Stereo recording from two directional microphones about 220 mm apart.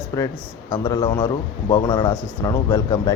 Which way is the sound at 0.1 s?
15° left (ahead or behind).